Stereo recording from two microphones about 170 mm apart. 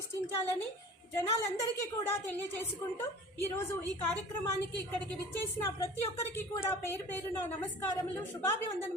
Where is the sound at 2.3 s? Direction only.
15° left (ahead or behind).